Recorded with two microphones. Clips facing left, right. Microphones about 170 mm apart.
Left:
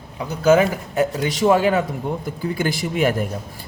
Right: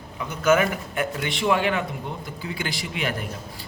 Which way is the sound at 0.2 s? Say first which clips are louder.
Left 5 dB; 35° left (ahead or behind).